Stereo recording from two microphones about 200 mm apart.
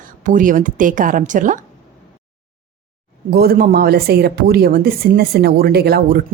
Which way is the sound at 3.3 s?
50° right (ahead or behind).